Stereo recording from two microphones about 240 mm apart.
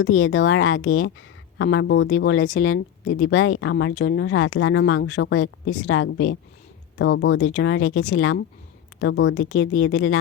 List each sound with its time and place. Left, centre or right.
0.0 s speech: left